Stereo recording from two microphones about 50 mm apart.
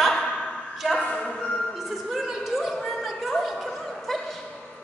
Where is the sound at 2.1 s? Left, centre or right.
Centre.